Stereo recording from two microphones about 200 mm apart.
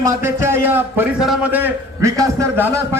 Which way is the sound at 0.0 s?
10° right (ahead or behind).